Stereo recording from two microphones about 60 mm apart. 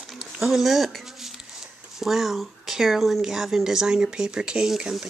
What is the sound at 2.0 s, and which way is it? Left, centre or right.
Speech, centre.